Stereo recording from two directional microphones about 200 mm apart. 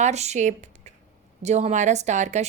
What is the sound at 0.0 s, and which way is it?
A woman's voice, 35° right (ahead or behind).